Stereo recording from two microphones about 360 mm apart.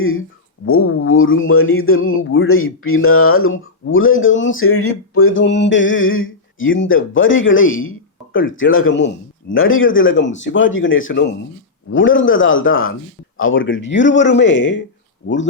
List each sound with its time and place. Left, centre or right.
0.6 s speech: left